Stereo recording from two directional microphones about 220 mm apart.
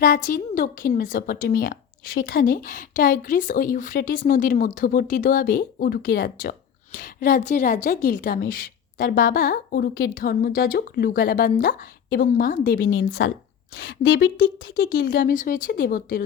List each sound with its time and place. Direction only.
0.3 s speech: 40° left (ahead or behind)